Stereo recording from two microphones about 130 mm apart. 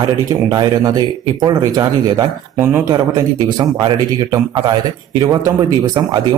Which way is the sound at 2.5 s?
15° right (ahead or behind).